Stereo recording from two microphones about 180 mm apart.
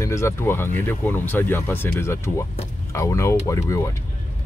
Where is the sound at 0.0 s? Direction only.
15° left (ahead or behind).